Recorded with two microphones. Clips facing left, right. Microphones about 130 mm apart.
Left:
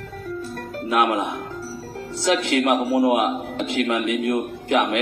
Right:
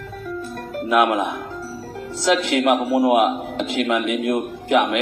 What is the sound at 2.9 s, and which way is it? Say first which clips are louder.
A man's voice: right 2 dB; 20° right (ahead or behind).